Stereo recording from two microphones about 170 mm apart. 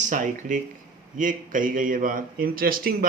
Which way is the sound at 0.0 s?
50° right (ahead or behind).